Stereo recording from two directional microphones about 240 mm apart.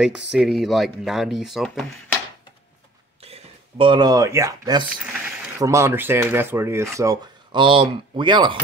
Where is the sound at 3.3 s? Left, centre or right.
Centre.